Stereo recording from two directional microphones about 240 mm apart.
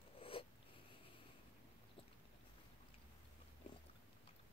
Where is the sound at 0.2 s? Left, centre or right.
Left.